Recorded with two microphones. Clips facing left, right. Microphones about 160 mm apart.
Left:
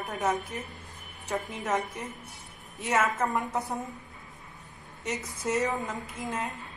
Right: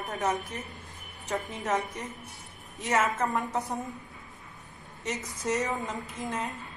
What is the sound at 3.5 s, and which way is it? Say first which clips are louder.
Speech: even; 20° right (ahead or behind).